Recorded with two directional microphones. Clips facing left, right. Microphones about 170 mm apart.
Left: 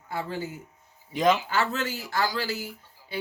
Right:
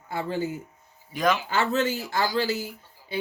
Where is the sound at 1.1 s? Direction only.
25° left (ahead or behind).